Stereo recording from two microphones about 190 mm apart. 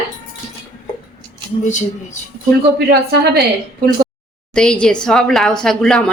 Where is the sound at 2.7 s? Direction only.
60° right (ahead or behind).